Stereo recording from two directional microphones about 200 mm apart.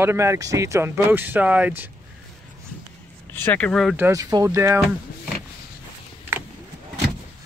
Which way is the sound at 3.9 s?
15° right (ahead or behind).